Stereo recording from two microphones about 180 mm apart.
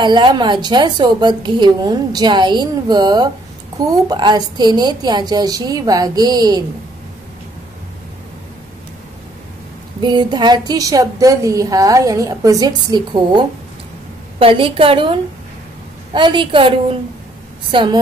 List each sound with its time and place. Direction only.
0.0 s a woman's voice: 25° right (ahead or behind)
9.9 s a woman's voice: 25° right (ahead or behind)